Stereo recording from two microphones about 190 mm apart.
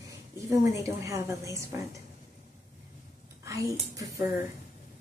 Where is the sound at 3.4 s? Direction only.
15° right (ahead or behind).